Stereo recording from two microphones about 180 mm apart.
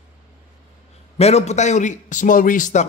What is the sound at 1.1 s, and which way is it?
Speech, 35° left (ahead or behind).